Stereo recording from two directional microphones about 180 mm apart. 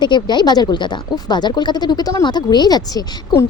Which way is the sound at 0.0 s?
25° left (ahead or behind).